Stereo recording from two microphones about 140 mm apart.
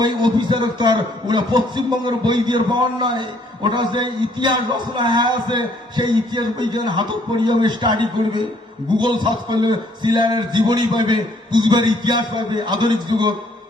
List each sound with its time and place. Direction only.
0.0 s a man's voice: 35° right (ahead or behind)